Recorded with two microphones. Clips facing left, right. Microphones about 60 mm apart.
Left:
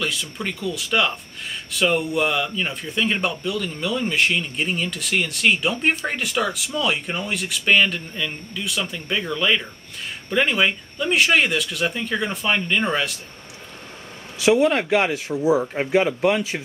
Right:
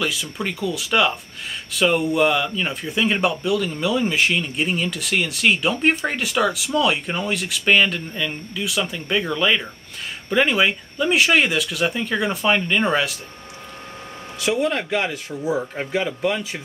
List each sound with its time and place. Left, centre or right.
0.0 s speech: centre
14.4 s speech: centre